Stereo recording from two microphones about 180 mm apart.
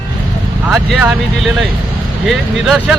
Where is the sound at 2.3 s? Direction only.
Centre (ahead or behind).